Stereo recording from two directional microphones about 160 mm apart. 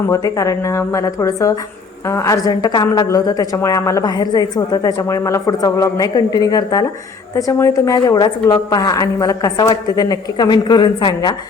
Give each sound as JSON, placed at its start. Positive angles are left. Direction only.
{"t": 0.1, "sound": "a woman's voice", "side_deg": 20}